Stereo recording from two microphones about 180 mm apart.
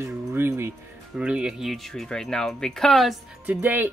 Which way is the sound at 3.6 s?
10° right (ahead or behind).